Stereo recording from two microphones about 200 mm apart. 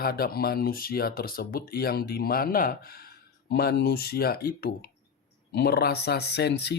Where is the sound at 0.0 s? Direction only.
50° left (ahead or behind).